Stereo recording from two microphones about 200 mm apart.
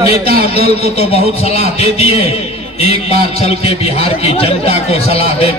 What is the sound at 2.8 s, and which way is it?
Speech, 50° right (ahead or behind).